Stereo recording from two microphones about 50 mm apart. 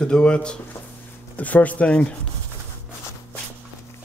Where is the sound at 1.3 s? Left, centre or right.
Left.